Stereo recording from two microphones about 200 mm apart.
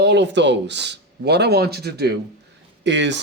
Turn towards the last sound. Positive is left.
turn(degrees=-60)  # may be behind; listen again after turning